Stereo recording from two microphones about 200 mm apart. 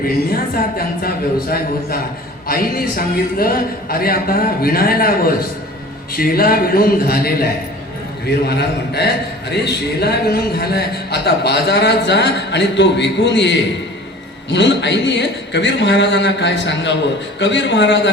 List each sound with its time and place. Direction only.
0.3 s a man's voice: 50° left (ahead or behind)